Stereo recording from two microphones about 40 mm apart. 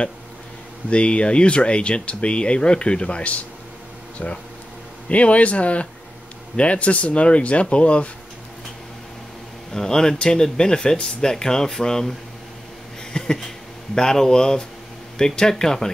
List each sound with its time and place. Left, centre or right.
0.8 s speech: left
5.1 s speech: left
9.7 s speech: centre
13.1 s a sound: centre
13.9 s speech: centre